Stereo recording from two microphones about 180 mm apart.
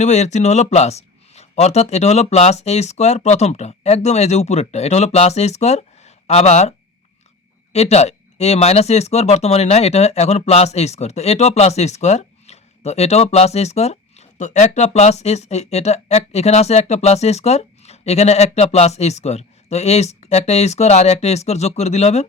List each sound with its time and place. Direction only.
0.0 s speech: 40° left (ahead or behind)